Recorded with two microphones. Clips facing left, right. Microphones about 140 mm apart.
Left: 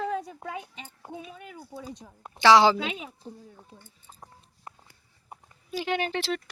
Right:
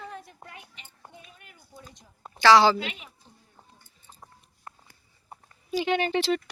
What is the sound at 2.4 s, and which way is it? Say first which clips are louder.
Speech: even; 20° left (ahead or behind).